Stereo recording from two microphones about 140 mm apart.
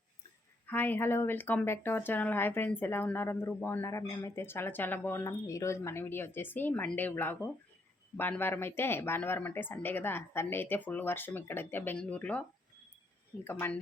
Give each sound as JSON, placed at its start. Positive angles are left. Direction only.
{"t": 0.7, "sound": "speech", "side_deg": 15}